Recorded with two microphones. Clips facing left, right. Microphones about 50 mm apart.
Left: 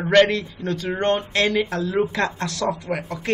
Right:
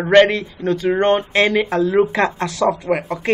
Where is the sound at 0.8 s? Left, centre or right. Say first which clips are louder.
Right 6 dB; right.